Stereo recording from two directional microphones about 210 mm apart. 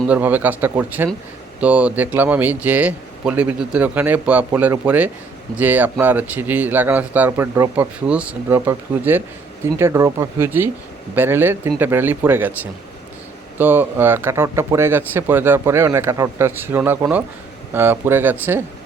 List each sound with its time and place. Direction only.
0.1 s a man's voice: 10° right (ahead or behind)
13.6 s a man's voice: 10° right (ahead or behind)